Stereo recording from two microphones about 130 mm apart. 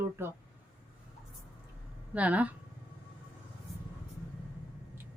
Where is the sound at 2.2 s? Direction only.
10° right (ahead or behind).